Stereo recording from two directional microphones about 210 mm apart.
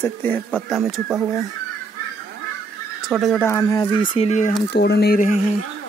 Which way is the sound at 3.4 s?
15° left (ahead or behind).